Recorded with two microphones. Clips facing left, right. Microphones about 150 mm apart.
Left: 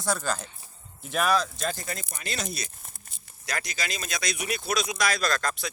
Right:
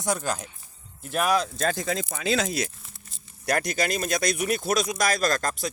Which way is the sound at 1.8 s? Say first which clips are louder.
Right 8 dB; 90° right.